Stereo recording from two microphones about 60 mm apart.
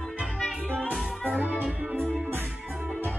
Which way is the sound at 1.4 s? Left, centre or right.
Right.